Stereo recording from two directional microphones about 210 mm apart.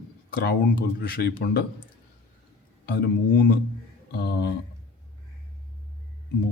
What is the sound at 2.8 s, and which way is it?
Speech, 50° left (ahead or behind).